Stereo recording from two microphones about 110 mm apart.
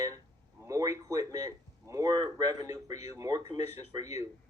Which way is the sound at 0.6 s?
30° right (ahead or behind).